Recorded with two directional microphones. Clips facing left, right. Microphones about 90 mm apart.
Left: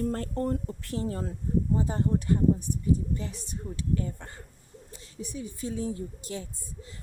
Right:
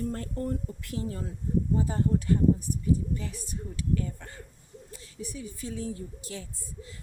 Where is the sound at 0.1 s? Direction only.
45° left (ahead or behind).